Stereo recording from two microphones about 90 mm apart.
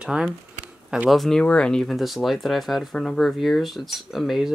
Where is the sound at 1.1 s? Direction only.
5° left (ahead or behind).